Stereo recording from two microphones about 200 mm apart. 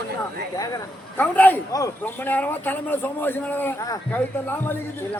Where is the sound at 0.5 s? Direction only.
15° left (ahead or behind).